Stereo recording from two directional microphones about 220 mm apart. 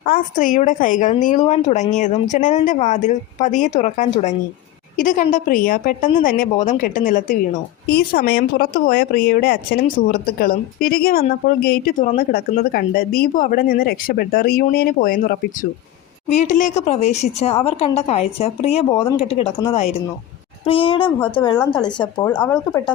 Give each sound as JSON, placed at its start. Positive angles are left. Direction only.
{"t": 0.0, "sound": "a woman's voice", "side_deg": 40}
{"t": 16.3, "sound": "speech", "side_deg": 30}
{"t": 22.3, "sound": "speech", "side_deg": 5}